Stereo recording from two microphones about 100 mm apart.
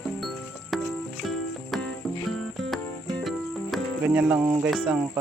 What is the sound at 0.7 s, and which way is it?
Music, centre (ahead or behind).